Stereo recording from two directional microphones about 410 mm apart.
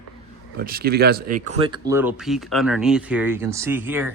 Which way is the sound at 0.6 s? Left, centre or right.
Right.